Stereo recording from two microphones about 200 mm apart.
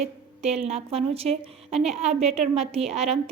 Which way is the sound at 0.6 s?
30° right (ahead or behind).